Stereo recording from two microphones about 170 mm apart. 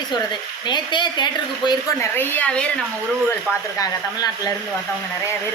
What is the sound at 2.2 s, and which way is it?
Speech, 10° left (ahead or behind).